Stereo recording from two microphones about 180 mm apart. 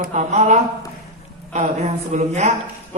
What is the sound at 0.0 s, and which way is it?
Speech, 40° right (ahead or behind).